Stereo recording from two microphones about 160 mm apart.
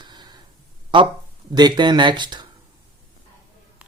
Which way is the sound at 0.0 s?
25° right (ahead or behind).